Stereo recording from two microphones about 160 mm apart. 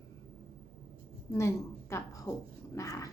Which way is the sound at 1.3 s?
15° left (ahead or behind).